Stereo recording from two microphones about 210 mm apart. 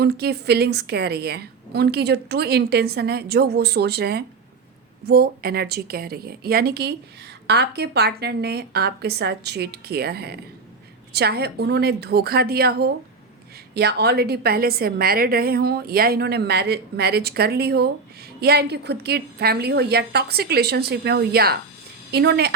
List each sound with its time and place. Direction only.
0.0 s a woman's voice: 50° right (ahead or behind)